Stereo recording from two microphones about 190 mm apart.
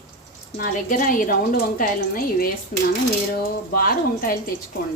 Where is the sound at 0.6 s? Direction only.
45° left (ahead or behind).